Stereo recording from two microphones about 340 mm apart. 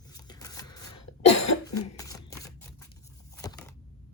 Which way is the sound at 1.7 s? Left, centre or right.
Centre.